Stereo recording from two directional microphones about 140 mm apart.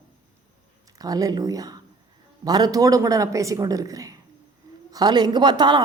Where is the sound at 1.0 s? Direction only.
25° right (ahead or behind).